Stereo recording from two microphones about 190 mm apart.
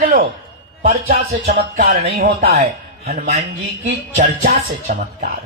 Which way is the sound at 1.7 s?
40° right (ahead or behind).